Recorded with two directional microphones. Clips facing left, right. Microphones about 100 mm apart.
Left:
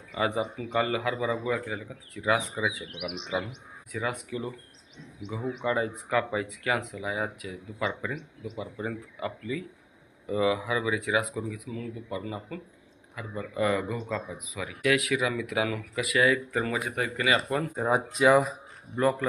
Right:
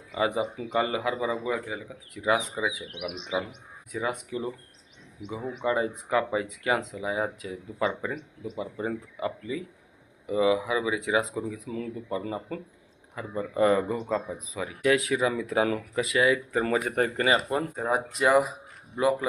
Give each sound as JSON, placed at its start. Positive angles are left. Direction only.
{"t": 0.1, "sound": "speech", "side_deg": -20}
{"t": 5.2, "sound": "speech", "side_deg": -10}
{"t": 5.6, "sound": "speech", "side_deg": -25}
{"t": 8.5, "sound": "speech", "side_deg": -25}
{"t": 16.6, "sound": "speech", "side_deg": -40}
{"t": 17.7, "sound": "speech", "side_deg": 0}